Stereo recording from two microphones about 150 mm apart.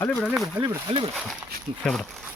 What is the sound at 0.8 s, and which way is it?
Speech, 35° right (ahead or behind).